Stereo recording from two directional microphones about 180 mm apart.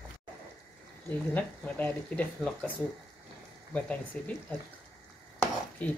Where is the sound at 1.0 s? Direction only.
10° left (ahead or behind).